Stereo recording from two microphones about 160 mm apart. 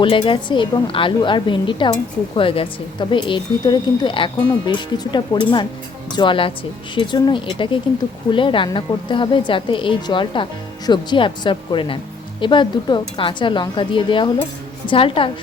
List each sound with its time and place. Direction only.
0.0 s a woman's voice: 30° left (ahead or behind)